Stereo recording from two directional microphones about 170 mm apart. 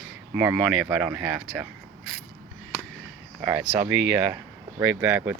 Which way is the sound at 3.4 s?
10° right (ahead or behind).